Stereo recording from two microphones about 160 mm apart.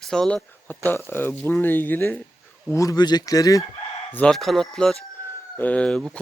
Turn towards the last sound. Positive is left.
turn(degrees=5)  # may be behind; listen again after turning